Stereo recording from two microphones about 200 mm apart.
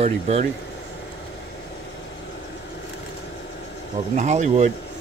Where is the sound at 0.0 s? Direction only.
35° right (ahead or behind).